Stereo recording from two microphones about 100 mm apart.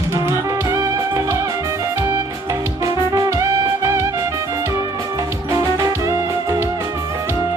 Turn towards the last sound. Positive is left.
turn(degrees=-30)  # may be behind; listen again after turning